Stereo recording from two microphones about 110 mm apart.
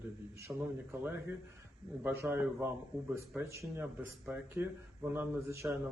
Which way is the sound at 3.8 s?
15° right (ahead or behind).